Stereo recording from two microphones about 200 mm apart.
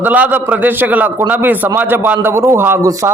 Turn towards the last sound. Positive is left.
turn(degrees=-15)  # may be behind; listen again after turning